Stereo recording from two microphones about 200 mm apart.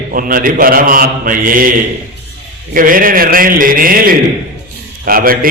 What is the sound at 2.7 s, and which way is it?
A man's voice, 45° right (ahead or behind).